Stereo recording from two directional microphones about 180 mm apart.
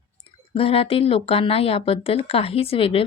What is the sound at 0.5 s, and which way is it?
Speech, 30° left (ahead or behind).